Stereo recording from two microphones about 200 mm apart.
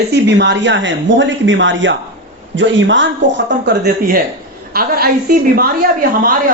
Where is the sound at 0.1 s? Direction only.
60° right (ahead or behind).